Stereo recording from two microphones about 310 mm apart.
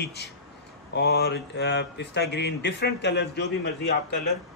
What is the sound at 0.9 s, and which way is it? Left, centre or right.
A man's voice, left.